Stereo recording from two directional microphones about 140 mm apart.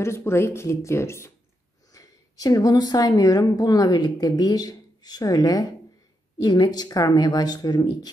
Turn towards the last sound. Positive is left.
turn(degrees=30)  # may be behind; listen again after turning